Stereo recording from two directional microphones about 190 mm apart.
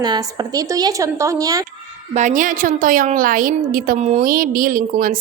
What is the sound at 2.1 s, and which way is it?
A woman's voice, 40° right (ahead or behind).